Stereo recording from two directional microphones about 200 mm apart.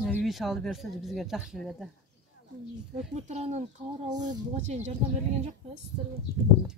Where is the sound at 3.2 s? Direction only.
35° right (ahead or behind).